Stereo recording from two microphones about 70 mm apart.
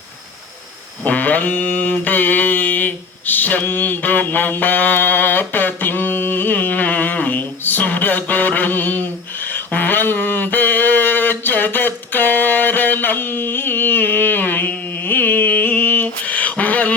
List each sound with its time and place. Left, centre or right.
1.0 s mantra: left